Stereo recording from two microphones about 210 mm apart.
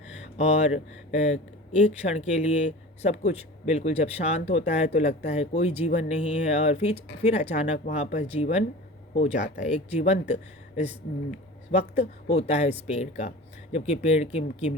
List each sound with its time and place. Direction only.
0.1 s speech: 30° left (ahead or behind)